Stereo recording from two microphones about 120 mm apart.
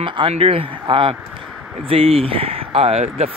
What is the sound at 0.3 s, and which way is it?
Speech, 50° right (ahead or behind).